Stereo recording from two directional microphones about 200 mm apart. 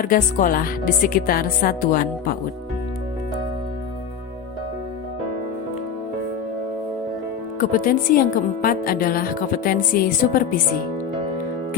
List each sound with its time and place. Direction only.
0.0 s speech: 45° left (ahead or behind)
7.6 s speech: 45° left (ahead or behind)